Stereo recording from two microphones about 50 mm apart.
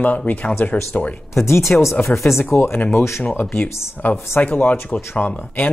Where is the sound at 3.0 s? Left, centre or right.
Left.